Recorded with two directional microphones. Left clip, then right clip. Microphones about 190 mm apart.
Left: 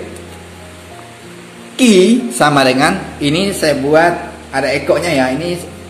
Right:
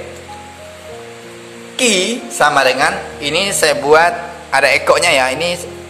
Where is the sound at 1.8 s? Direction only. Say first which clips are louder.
Left 4 dB; 10° right (ahead or behind).